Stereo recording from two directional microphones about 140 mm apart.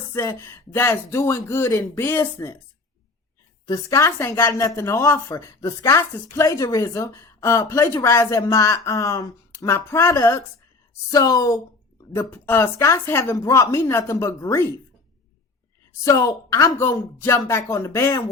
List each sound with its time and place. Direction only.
0.1 s a woman's voice: 20° left (ahead or behind)
3.7 s a woman's voice: 20° left (ahead or behind)
16.0 s a woman's voice: 25° left (ahead or behind)